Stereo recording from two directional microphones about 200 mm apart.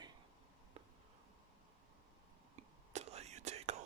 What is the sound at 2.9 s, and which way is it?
Whispering, 30° right (ahead or behind).